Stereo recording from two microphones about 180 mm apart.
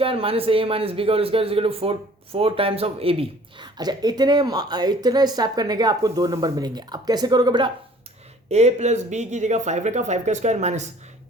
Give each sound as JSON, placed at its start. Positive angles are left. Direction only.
{"t": 0.0, "sound": "a man's voice", "side_deg": -30}
{"t": 8.4, "sound": "speech", "side_deg": -40}